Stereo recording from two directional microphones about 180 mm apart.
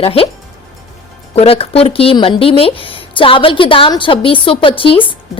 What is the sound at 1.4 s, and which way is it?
Speech, 35° left (ahead or behind).